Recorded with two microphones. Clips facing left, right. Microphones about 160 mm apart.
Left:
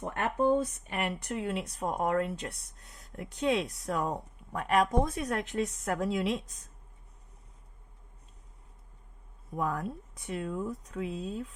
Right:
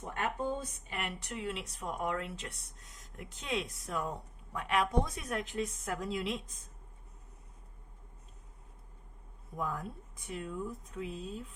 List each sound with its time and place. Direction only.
0.0 s speech: 60° left (ahead or behind)
3.2 s speech: 65° left (ahead or behind)
9.6 s speech: 75° left (ahead or behind)